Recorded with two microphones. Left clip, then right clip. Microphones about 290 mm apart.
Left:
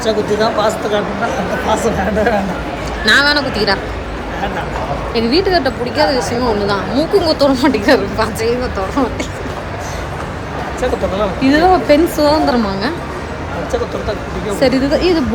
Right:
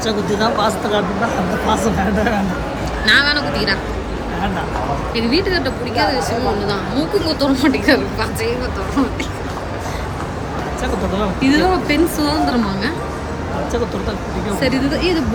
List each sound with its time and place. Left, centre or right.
0.0 s speech: centre
3.1 s a woman's voice: centre
5.1 s a woman's voice: centre
11.2 s a woman's voice: centre
14.6 s a woman's voice: centre